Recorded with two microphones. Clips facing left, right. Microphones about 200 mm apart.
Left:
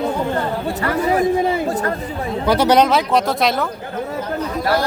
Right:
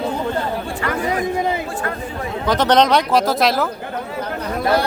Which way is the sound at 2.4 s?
10° left (ahead or behind).